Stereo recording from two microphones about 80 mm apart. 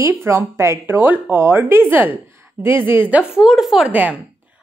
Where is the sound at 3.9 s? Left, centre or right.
Centre.